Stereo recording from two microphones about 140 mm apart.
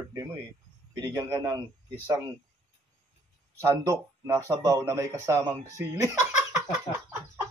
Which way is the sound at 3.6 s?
20° right (ahead or behind).